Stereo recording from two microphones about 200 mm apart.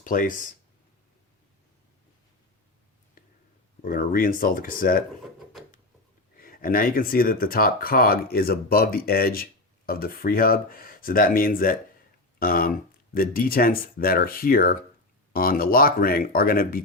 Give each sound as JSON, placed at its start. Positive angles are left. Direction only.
{"t": 0.0, "sound": "speech", "side_deg": 40}
{"t": 3.8, "sound": "speech", "side_deg": 45}
{"t": 6.3, "sound": "speech", "side_deg": 45}